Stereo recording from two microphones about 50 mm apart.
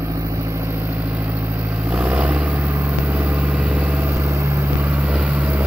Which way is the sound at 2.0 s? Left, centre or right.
Right.